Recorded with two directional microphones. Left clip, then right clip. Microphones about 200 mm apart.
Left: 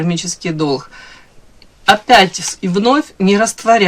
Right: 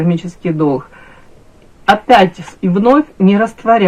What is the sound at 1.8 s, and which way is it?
Speech, 30° left (ahead or behind).